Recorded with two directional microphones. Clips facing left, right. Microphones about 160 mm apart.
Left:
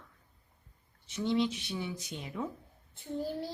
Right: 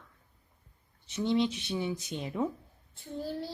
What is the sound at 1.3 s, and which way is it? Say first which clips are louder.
A woman's voice: right 2 dB; 25° right (ahead or behind).